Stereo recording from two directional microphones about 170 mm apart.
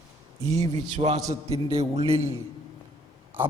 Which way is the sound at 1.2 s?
20° right (ahead or behind).